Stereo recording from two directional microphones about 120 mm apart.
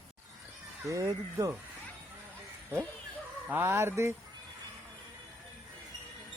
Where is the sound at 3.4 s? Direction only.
20° right (ahead or behind).